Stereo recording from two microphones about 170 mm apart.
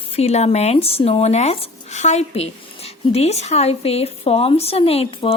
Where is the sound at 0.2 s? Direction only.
40° left (ahead or behind).